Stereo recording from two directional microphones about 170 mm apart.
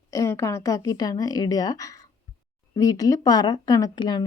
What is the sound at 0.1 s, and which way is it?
A woman's voice, 20° left (ahead or behind).